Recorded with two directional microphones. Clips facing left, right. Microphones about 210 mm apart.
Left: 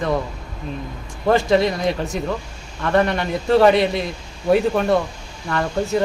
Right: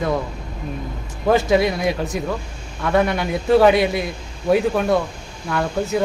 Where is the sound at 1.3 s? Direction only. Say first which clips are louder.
Even; 5° right (ahead or behind).